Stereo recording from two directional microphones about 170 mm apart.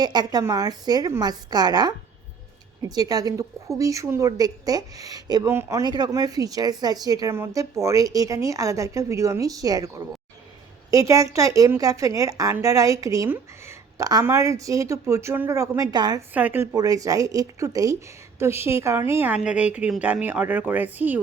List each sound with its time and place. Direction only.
0.0 s a woman's voice: 25° right (ahead or behind)
10.9 s a woman's voice: 20° right (ahead or behind)
16.3 s a woman's voice: 10° right (ahead or behind)
16.7 s a woman's voice: 20° right (ahead or behind)